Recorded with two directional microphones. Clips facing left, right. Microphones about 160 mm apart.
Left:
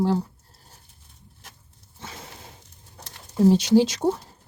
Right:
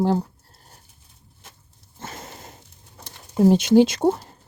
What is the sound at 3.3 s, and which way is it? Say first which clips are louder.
Speech: right 2 dB; 55° right (ahead or behind).